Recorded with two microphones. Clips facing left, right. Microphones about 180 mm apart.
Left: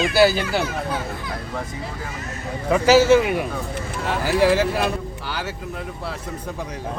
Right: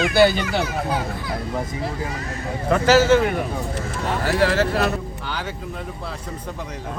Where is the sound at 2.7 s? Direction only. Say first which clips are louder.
Left 1 dB; 10° left (ahead or behind).